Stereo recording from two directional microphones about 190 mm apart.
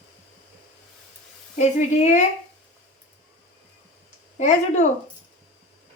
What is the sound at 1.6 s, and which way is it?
Speech, 35° left (ahead or behind).